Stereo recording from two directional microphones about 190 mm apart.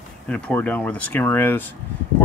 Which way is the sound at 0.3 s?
10° left (ahead or behind).